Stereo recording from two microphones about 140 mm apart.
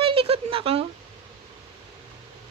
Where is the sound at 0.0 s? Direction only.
40° right (ahead or behind).